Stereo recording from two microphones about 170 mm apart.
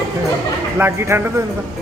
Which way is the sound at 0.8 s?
15° right (ahead or behind).